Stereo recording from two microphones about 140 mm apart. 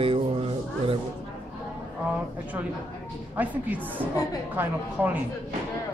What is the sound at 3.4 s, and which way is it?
Speech, 10° right (ahead or behind).